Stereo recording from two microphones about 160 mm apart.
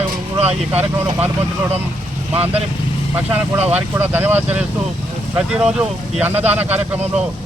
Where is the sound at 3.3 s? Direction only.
10° right (ahead or behind).